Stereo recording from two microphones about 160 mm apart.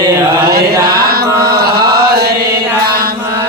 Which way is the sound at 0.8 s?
75° right (ahead or behind).